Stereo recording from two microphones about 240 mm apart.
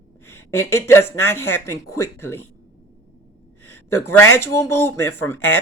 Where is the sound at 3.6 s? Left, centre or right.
Left.